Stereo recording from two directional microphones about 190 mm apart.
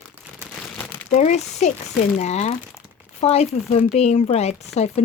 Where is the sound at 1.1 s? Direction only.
40° left (ahead or behind).